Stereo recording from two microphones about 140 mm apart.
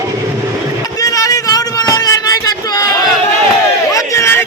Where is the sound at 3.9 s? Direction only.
20° left (ahead or behind).